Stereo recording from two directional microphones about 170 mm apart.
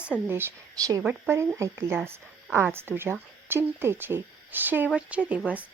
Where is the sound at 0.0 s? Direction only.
10° right (ahead or behind).